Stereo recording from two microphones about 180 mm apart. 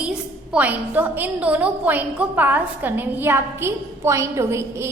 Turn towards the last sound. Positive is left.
turn(degrees=-15)  # may be behind; listen again after turning